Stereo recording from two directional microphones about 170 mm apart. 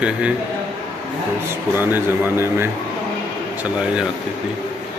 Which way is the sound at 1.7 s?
15° right (ahead or behind).